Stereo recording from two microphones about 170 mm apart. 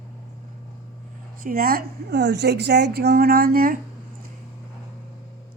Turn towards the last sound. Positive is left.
turn(degrees=-60)  # may be behind; listen again after turning